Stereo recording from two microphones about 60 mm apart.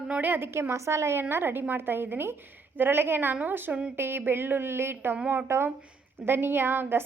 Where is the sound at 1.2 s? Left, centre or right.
Right.